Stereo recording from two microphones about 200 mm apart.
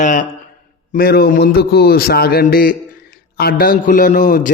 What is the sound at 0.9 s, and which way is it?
A man's voice, 50° left (ahead or behind).